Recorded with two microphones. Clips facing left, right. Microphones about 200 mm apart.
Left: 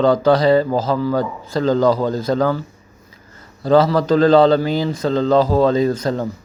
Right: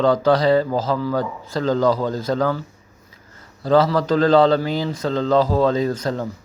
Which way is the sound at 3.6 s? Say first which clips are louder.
Left 3 dB; 20° left (ahead or behind).